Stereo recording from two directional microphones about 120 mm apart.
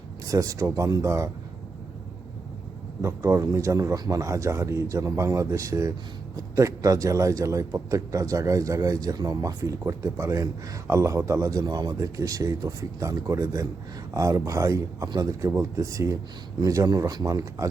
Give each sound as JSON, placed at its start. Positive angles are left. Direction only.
{"t": 0.3, "sound": "a man's voice", "side_deg": -25}
{"t": 3.0, "sound": "a man's voice", "side_deg": -25}